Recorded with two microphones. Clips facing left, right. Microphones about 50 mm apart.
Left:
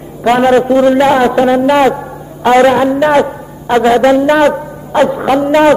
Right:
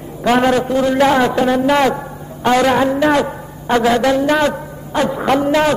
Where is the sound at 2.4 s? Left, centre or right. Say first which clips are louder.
Left 6 dB; left.